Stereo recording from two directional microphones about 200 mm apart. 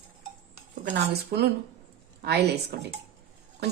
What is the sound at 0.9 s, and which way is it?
Speech, 55° right (ahead or behind).